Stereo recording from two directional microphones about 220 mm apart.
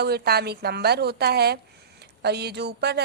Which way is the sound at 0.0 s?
45° right (ahead or behind).